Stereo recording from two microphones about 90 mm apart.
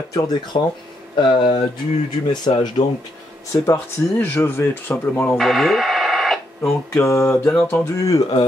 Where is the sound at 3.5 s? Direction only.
25° left (ahead or behind).